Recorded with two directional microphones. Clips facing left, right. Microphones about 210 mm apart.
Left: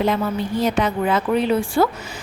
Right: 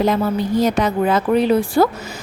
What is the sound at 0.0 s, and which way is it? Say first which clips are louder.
A woman's voice: right 3 dB; 40° right (ahead or behind).